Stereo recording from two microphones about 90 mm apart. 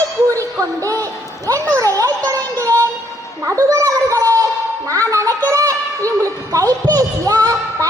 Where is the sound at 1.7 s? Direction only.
40° right (ahead or behind).